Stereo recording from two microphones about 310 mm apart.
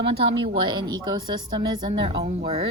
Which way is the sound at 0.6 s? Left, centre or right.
Centre.